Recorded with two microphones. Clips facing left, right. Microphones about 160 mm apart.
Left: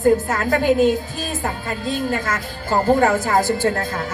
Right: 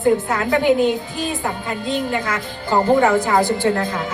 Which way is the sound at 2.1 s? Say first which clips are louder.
Right 1 dB; 45° left (ahead or behind).